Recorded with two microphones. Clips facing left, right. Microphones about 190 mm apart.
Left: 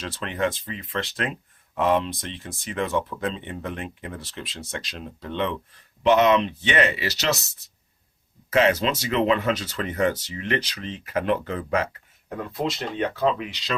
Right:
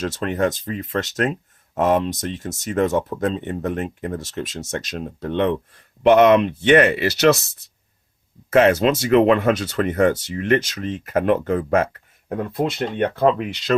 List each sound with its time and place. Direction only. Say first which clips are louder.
0.0 s speech: right 5 dB; 45° right (ahead or behind)
8.4 s speech: right 6 dB; 50° right (ahead or behind)